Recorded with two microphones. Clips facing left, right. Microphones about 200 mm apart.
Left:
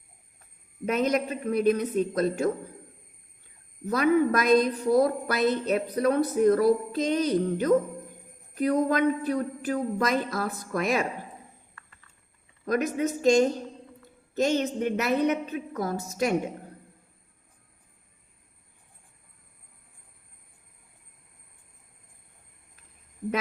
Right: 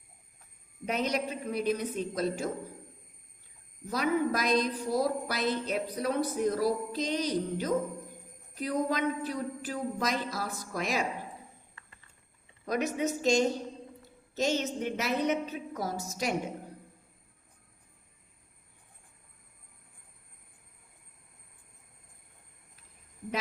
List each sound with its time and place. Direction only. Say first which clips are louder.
0.9 s a man's voice: left 6 dB; 50° left (ahead or behind)
3.8 s a woman's voice: left 6 dB; 55° left (ahead or behind)
12.6 s a man's voice: left 4 dB; 50° left (ahead or behind)